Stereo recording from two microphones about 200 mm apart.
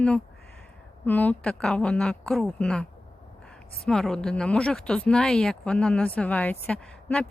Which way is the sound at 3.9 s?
5° left (ahead or behind).